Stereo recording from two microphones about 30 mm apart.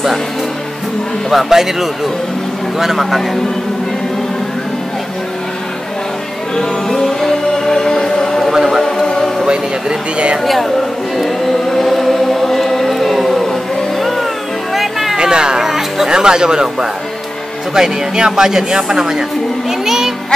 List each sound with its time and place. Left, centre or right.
1.3 s speech: centre
6.5 s music: centre
9.5 s speech: right
10.4 s speech: centre
11.6 s choir: centre
14.7 s music: centre
15.1 s a sound: right
15.6 s music: centre
16.1 s speech: right